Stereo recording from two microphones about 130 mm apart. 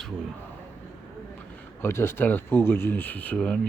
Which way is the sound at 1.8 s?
20° left (ahead or behind).